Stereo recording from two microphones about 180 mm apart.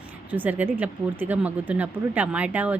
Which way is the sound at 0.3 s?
10° right (ahead or behind).